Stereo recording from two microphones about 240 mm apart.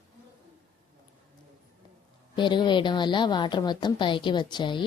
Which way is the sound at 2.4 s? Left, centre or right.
Centre.